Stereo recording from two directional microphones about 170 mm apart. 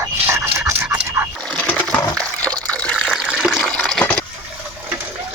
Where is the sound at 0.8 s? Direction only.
10° right (ahead or behind).